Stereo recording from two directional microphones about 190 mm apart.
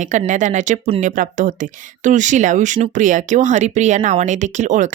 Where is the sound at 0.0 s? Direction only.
40° right (ahead or behind).